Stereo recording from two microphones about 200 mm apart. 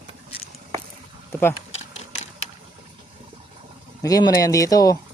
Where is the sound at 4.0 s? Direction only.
20° left (ahead or behind).